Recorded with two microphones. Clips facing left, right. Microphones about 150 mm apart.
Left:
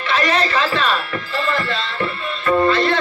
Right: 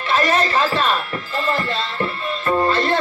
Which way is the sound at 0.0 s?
45° right (ahead or behind).